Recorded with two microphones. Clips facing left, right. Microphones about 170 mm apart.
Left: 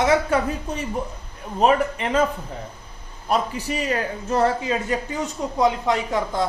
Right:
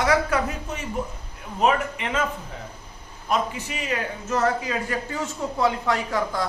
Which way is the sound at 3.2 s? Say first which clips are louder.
Left 2 dB; 35° left (ahead or behind).